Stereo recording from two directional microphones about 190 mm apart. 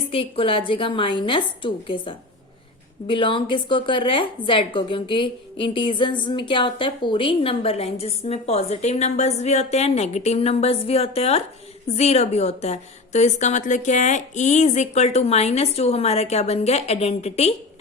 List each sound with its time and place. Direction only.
0.1 s a woman's voice: 30° left (ahead or behind)